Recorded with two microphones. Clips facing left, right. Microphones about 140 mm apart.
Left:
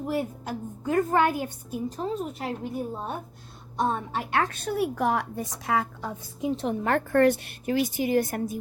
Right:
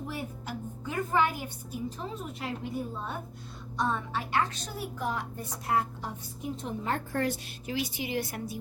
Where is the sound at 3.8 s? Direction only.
45° left (ahead or behind).